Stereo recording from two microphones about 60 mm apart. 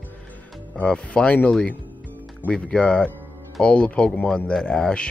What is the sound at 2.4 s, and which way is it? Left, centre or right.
Speech, centre.